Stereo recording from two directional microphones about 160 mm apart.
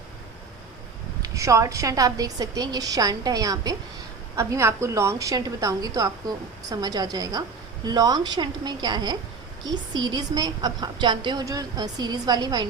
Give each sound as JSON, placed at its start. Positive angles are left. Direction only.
{"t": 1.2, "sound": "a woman's voice", "side_deg": -20}